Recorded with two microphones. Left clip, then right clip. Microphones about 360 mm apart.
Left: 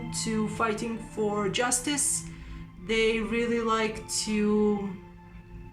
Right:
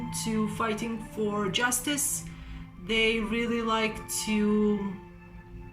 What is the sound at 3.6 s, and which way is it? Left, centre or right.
Speech, centre.